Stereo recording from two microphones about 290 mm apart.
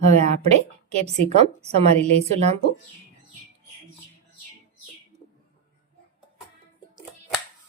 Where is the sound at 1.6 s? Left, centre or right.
Right.